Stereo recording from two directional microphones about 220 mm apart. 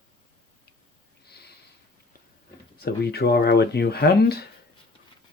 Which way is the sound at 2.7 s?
45° left (ahead or behind).